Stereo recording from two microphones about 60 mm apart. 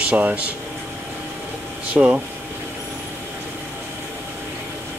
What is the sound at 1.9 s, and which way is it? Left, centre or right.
Speech, right.